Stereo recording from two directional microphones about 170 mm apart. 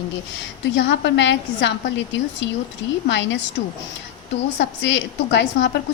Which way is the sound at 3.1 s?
90° left.